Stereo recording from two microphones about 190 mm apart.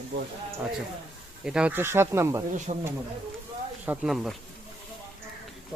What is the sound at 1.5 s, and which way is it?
Speech, 5° right (ahead or behind).